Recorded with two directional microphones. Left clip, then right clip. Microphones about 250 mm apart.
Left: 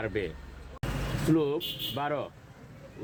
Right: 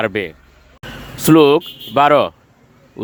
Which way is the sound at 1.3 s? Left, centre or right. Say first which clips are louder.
Right 18 dB; right.